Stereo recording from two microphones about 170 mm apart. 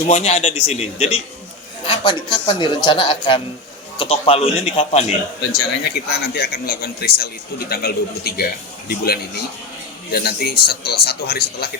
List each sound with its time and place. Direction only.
0.1 s a man's voice: 40° left (ahead or behind)
1.9 s a man's voice: 30° left (ahead or behind)
5.5 s a man's voice: 70° left (ahead or behind)